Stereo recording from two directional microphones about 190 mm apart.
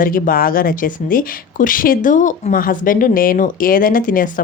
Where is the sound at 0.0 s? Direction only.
50° left (ahead or behind).